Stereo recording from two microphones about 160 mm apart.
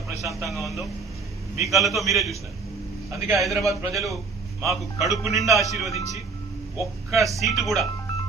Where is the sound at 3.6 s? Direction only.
20° right (ahead or behind).